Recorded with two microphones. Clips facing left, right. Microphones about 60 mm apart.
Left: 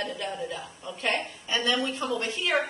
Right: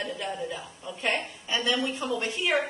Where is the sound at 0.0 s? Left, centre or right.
Centre.